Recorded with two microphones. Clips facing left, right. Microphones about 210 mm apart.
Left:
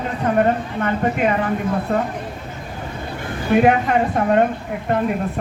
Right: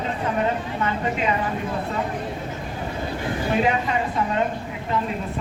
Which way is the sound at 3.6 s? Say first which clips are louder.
Left 7 dB; 60° left (ahead or behind).